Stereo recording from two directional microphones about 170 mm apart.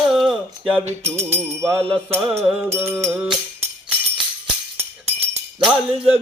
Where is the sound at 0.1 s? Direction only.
Centre (ahead or behind).